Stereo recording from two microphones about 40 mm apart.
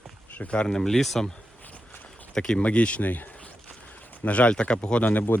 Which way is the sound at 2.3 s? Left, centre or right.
Left.